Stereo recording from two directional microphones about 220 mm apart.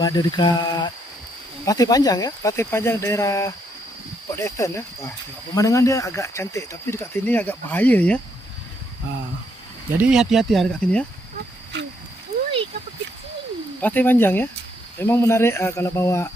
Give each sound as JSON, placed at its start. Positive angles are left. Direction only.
{"t": 0.0, "sound": "speech", "side_deg": 15}
{"t": 10.0, "sound": "speech", "side_deg": 0}
{"t": 12.3, "sound": "a sound", "side_deg": -30}
{"t": 13.8, "sound": "speech", "side_deg": 10}